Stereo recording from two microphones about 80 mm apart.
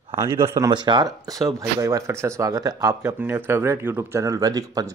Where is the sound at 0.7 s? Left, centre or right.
Right.